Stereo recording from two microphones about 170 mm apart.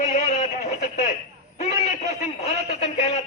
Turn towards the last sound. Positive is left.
turn(degrees=40)  # may be behind; listen again after turning